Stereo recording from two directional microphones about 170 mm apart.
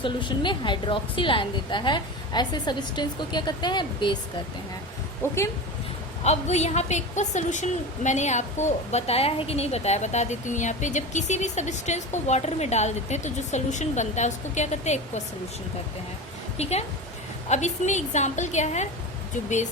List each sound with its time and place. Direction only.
0.0 s a woman's voice: 30° left (ahead or behind)
5.2 s speech: 15° left (ahead or behind)
6.2 s a woman's voice: 40° left (ahead or behind)
16.6 s a woman's voice: 40° left (ahead or behind)